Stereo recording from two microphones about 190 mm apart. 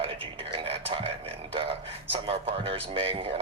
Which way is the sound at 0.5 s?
30° right (ahead or behind).